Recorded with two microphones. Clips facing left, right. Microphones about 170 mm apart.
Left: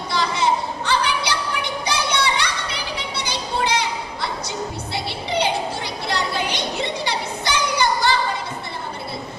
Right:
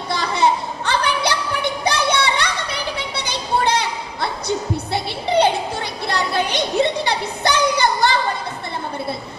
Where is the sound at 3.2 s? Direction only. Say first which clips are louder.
Right 4 dB; 55° right (ahead or behind).